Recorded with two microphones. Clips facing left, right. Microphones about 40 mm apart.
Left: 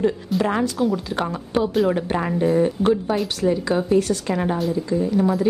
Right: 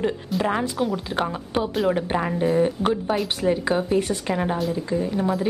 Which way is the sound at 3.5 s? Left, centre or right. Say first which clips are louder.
Left 1 dB; right.